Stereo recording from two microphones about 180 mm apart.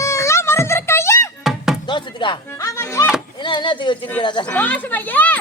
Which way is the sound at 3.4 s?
25° left (ahead or behind).